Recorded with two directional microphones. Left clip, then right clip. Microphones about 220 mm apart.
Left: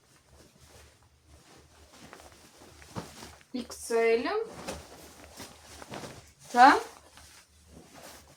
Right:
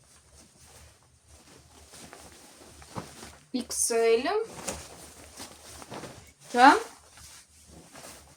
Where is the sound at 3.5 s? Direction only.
45° right (ahead or behind).